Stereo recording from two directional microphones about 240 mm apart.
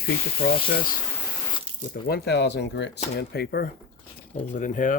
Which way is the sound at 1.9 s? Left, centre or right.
Left.